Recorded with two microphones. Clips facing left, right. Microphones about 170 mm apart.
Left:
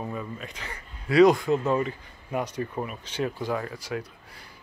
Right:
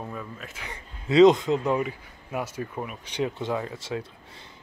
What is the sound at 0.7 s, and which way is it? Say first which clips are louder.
Speech: right 2 dB; 20° right (ahead or behind).